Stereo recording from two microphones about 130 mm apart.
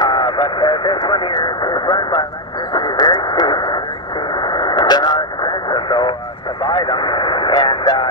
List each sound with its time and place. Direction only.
0.0 s vehicle: 40° left (ahead or behind)
2.7 s radio: 35° left (ahead or behind)
6.6 s speech: 40° left (ahead or behind)